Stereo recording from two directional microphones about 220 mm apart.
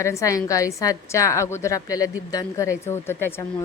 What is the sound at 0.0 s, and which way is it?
A woman's voice, 15° left (ahead or behind).